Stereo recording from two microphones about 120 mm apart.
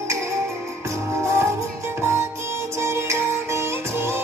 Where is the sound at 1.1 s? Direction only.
25° right (ahead or behind).